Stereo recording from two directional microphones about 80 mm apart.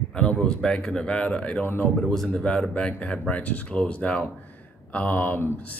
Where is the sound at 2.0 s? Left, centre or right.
Centre.